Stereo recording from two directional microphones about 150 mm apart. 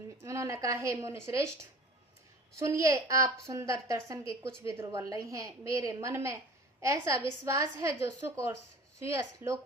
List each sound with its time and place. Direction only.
0.2 s a woman's voice: 20° right (ahead or behind)
2.6 s a woman's voice: 20° right (ahead or behind)